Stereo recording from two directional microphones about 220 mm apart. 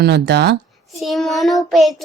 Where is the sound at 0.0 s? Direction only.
50° right (ahead or behind).